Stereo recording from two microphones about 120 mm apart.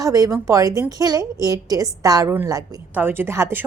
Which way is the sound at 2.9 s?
15° right (ahead or behind).